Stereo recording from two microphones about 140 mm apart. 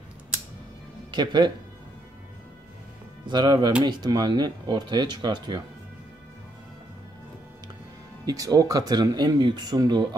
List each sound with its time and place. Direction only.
1.1 s speech: 35° right (ahead or behind)
3.3 s speech: 35° right (ahead or behind)
8.3 s speech: 25° right (ahead or behind)